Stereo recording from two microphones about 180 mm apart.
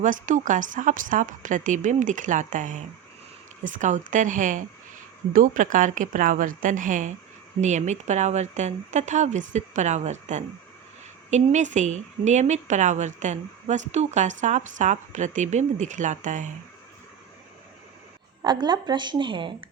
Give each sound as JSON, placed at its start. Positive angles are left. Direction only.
{"t": 0.0, "sound": "a woman's voice", "side_deg": -45}
{"t": 18.4, "sound": "a woman's voice", "side_deg": -25}